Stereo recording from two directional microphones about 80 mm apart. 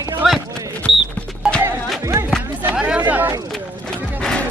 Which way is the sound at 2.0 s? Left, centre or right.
Right.